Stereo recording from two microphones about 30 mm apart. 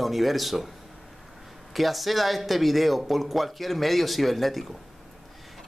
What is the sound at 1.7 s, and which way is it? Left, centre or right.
Speech, centre.